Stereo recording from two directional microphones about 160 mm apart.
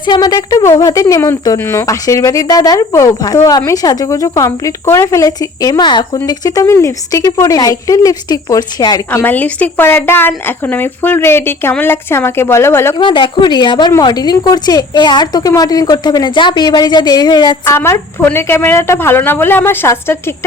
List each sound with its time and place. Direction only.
0.0 s a woman's voice: 25° left (ahead or behind)
9.0 s a woman's voice: 10° left (ahead or behind)
13.0 s a woman's voice: 30° left (ahead or behind)
17.7 s a woman's voice: 15° left (ahead or behind)